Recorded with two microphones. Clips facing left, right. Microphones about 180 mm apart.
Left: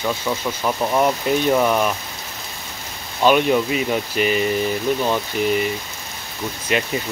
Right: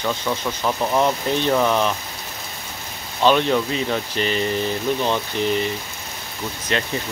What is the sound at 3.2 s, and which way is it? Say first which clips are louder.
Speech: left 2 dB; 10° left (ahead or behind).